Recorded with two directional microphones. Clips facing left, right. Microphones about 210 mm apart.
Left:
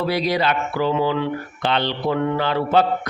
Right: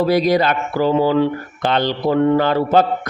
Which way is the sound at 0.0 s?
45° right (ahead or behind).